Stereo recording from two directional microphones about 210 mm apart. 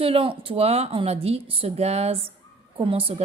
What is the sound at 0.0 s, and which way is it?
A woman's voice, 25° right (ahead or behind).